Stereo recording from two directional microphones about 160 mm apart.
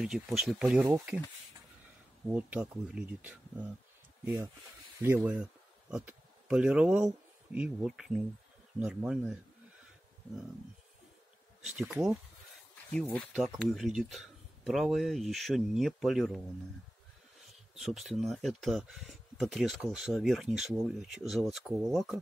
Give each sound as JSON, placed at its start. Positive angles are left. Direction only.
{"t": 0.0, "sound": "speech", "side_deg": 0}
{"t": 2.2, "sound": "speech", "side_deg": -5}
{"t": 11.6, "sound": "speech", "side_deg": -5}
{"t": 12.9, "sound": "speech", "side_deg": 10}
{"t": 17.7, "sound": "speech", "side_deg": 0}